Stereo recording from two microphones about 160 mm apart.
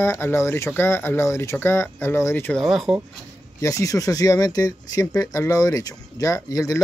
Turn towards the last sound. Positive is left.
turn(degrees=20)  # may be behind; listen again after turning